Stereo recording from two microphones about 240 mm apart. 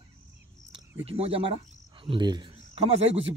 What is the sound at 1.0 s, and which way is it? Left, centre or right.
Speech, right.